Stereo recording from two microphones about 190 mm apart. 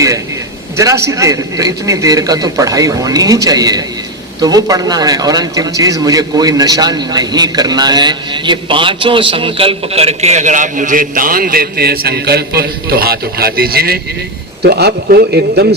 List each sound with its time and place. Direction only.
0.8 s a man's voice: 15° right (ahead or behind); by 15.6 s 55° right (ahead or behind)